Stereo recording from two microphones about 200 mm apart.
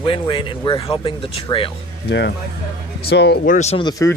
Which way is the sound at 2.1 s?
60° left (ahead or behind).